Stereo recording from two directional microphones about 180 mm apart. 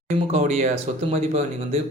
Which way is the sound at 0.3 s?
35° right (ahead or behind).